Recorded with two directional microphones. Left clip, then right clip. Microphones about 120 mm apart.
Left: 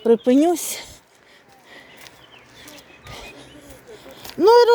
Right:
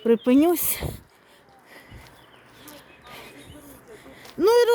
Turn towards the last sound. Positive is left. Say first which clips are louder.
# left 5 dB
turn(degrees=0)  # may be behind; listen again after turning